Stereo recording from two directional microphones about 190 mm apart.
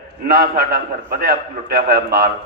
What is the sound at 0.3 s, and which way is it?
A man's voice, 55° right (ahead or behind).